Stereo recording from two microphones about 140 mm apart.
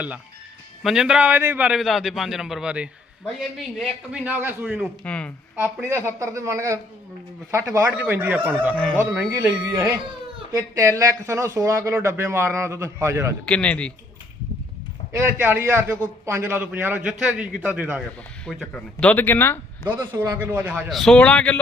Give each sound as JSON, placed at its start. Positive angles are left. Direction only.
{"t": 0.8, "sound": "a man's voice", "side_deg": -5}
{"t": 4.1, "sound": "a man's voice", "side_deg": -10}
{"t": 5.0, "sound": "speech", "side_deg": 10}
{"t": 5.5, "sound": "a man's voice", "side_deg": -15}
{"t": 10.5, "sound": "speech", "side_deg": -25}
{"t": 13.4, "sound": "speech", "side_deg": 10}
{"t": 15.1, "sound": "a man's voice", "side_deg": -15}
{"t": 18.4, "sound": "speech", "side_deg": 5}
{"t": 19.9, "sound": "a man's voice", "side_deg": -20}